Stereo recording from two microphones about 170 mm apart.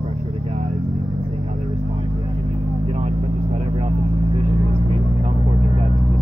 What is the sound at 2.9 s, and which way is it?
Vehicle, 40° right (ahead or behind).